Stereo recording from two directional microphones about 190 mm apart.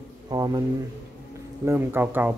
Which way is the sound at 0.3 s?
20° right (ahead or behind).